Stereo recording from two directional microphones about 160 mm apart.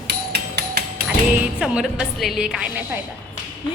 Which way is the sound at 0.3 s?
85° right.